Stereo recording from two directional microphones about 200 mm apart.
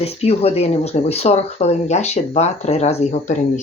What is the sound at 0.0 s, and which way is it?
Speech, 30° left (ahead or behind).